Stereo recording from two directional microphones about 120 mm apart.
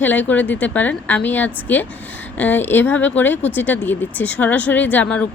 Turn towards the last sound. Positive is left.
turn(degrees=10)  # may be behind; listen again after turning